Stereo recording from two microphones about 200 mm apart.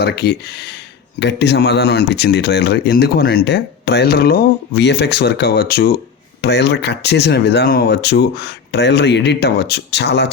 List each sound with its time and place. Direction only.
0.0 s speech: 55° left (ahead or behind)